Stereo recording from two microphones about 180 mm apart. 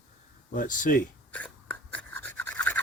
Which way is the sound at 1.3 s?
5° left (ahead or behind).